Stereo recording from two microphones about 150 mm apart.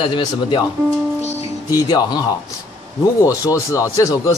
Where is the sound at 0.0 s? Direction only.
35° left (ahead or behind).